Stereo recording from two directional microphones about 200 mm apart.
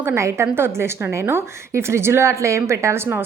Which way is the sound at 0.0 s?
15° right (ahead or behind).